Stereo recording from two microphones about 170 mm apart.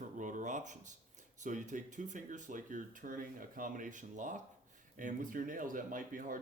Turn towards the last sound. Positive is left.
turn(degrees=-55)  # may be behind; listen again after turning